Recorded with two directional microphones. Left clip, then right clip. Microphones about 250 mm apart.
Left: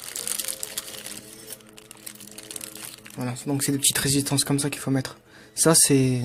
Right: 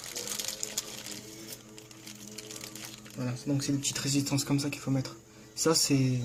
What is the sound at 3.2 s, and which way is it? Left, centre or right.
Speech, left.